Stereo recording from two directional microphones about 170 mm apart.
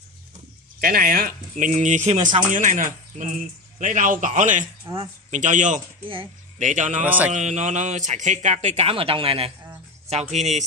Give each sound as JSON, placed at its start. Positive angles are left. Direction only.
{"t": 0.7, "sound": "speech", "side_deg": -60}
{"t": 4.9, "sound": "speech", "side_deg": -25}
{"t": 5.3, "sound": "speech", "side_deg": -45}
{"t": 7.1, "sound": "a man's voice", "side_deg": -10}
{"t": 7.3, "sound": "speech", "side_deg": -45}